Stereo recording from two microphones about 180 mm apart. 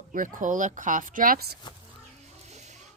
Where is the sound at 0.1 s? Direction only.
45° right (ahead or behind).